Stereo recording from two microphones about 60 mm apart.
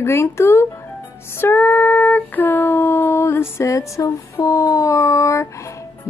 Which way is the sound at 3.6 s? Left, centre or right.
Left.